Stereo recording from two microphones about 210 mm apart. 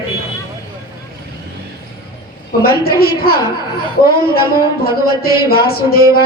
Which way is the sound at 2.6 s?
45° left (ahead or behind).